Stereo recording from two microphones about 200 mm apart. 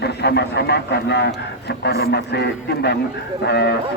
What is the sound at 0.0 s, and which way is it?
Speech, 55° left (ahead or behind).